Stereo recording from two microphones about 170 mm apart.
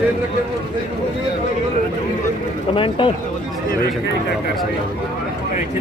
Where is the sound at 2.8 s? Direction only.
30° left (ahead or behind).